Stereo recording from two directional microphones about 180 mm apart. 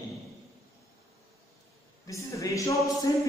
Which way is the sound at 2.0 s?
15° left (ahead or behind).